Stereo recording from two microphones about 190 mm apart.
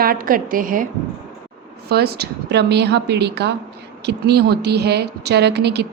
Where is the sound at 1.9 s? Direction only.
55° right (ahead or behind).